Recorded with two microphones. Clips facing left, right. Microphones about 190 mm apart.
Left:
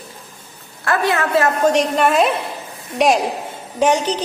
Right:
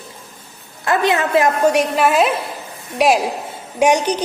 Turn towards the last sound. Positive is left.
turn(degrees=-15)  # may be behind; listen again after turning